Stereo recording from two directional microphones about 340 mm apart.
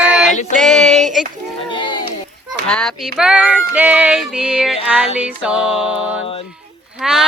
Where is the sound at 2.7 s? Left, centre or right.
Centre.